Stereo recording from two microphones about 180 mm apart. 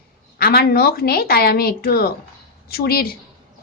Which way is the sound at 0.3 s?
60° left (ahead or behind).